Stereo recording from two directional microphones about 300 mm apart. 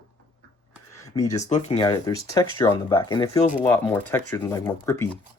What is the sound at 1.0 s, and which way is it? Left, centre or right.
Speech, centre.